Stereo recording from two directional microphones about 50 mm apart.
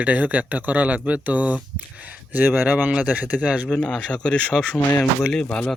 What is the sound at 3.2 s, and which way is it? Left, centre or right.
Speech, right.